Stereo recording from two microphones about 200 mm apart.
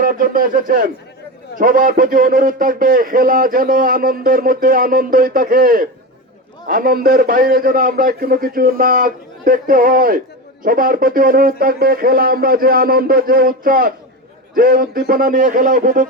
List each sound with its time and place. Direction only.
0.0 s speech: 45° right (ahead or behind)